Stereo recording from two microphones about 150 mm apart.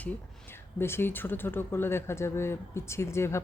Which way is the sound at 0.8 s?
15° left (ahead or behind).